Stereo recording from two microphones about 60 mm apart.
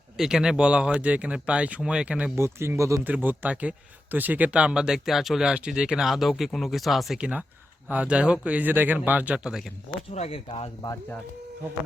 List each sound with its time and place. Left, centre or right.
0.2 s speech: centre
2.3 s speech: right
3.0 s speech: right; by 7.2 s centre
7.2 s speech: centre